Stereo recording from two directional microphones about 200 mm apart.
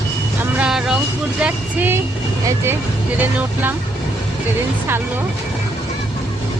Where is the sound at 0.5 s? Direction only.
5° right (ahead or behind).